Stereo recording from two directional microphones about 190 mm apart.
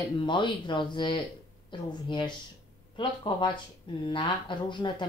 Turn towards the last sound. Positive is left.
turn(degrees=25)  # may be behind; listen again after turning